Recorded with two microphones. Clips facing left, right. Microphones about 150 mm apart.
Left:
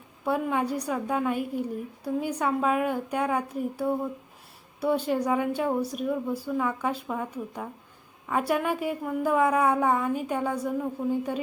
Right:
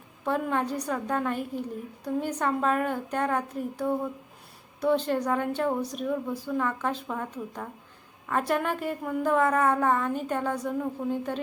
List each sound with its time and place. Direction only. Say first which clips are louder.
0.3 s a woman's voice: left 1 dB; 10° left (ahead or behind)